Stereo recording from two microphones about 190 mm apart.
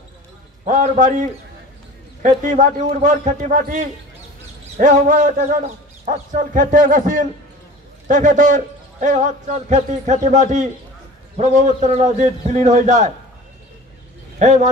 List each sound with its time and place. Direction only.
0.7 s a man's voice: 40° right (ahead or behind)
14.4 s a man's voice: 40° right (ahead or behind)